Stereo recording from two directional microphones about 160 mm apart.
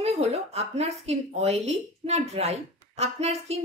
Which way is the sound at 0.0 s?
40° right (ahead or behind).